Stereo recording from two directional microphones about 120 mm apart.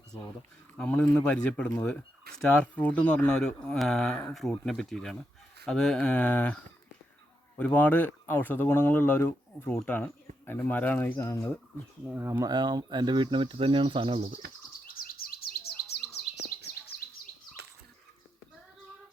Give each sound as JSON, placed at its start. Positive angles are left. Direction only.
{"t": 0.8, "sound": "speech", "side_deg": 10}
{"t": 7.6, "sound": "speech", "side_deg": 15}
{"t": 12.1, "sound": "speech", "side_deg": -20}